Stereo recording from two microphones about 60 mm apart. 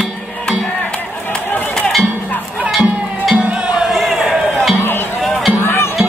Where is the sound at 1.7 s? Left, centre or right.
Centre.